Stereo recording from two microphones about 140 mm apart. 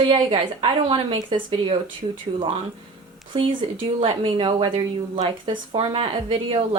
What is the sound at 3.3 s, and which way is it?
Speech, 35° right (ahead or behind).